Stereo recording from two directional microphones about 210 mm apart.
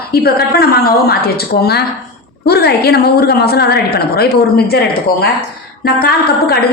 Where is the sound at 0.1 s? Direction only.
50° left (ahead or behind).